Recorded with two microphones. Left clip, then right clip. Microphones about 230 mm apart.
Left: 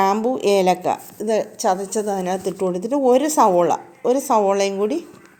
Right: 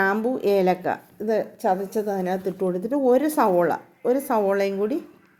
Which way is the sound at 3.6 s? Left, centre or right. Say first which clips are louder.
Left 4 dB; left.